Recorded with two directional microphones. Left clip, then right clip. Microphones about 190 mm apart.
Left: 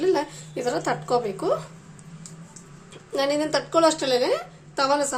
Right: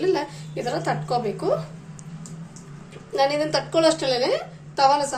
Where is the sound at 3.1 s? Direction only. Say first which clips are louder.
Right 2 dB; 55° left (ahead or behind).